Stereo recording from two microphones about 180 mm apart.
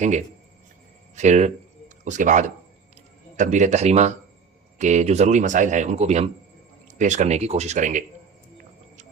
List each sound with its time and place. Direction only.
0.0 s speech: 40° right (ahead or behind)